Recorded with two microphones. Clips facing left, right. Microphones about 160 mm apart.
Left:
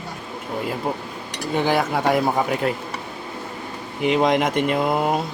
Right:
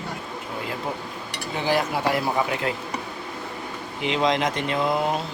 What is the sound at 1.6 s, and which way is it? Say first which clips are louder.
Speech: left 3 dB; 55° left (ahead or behind).